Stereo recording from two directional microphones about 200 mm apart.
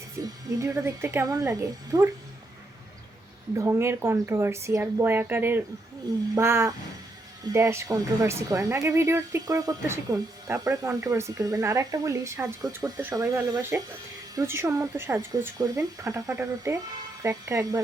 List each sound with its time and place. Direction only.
0.2 s speech: 15° right (ahead or behind)
3.5 s speech: 15° right (ahead or behind)